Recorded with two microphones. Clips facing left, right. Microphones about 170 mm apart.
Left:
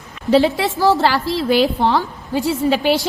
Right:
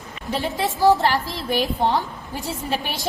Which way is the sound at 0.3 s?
75° left (ahead or behind).